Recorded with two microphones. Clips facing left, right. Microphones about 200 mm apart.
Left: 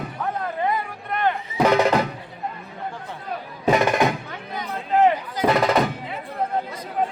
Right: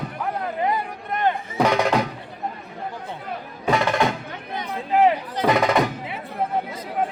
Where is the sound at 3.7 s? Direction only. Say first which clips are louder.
Left 2 dB; 20° left (ahead or behind).